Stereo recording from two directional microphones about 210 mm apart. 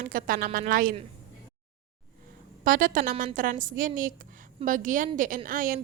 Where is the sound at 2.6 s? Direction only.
40° right (ahead or behind).